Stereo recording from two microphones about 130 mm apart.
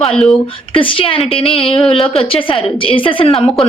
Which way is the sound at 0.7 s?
45° left (ahead or behind).